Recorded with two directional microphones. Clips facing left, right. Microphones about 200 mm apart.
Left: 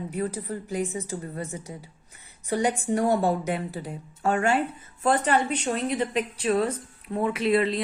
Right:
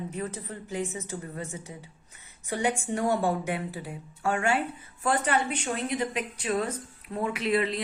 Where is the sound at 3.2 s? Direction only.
40° left (ahead or behind).